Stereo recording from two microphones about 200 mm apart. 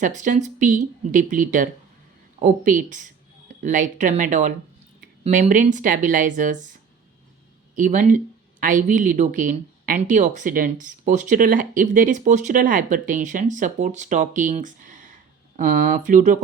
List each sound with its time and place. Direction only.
0.0 s speech: 40° right (ahead or behind)
7.8 s speech: 40° right (ahead or behind)